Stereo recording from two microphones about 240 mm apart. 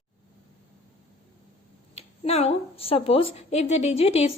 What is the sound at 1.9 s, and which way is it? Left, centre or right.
A woman's voice, left.